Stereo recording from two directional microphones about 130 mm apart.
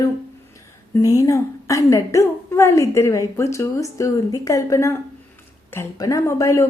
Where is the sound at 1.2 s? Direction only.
25° left (ahead or behind).